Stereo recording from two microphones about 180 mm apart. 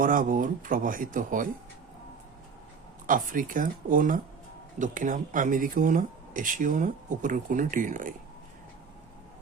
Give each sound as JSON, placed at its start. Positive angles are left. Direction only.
{"t": 0.0, "sound": "speech", "side_deg": -50}
{"t": 3.1, "sound": "speech", "side_deg": -50}